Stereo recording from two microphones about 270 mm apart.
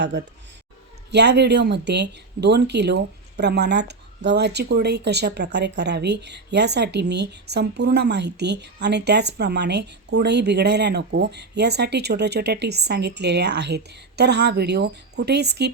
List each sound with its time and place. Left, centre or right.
0.0 s speech: right